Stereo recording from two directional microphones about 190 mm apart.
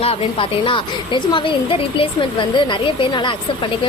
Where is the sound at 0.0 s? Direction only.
30° left (ahead or behind).